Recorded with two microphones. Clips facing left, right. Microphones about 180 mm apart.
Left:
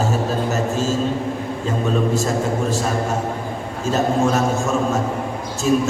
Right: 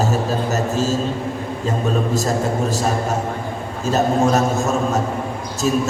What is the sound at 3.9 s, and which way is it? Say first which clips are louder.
Speech: right 2 dB; 40° right (ahead or behind).